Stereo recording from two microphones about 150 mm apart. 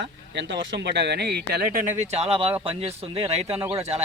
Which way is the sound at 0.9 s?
90° right.